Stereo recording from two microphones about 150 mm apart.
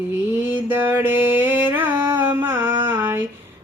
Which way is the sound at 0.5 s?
15° right (ahead or behind).